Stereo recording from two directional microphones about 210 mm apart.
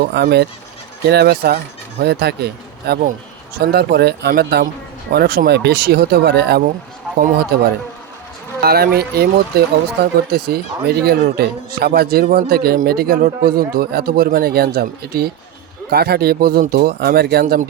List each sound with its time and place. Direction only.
0.0 s speech: 50° right (ahead or behind)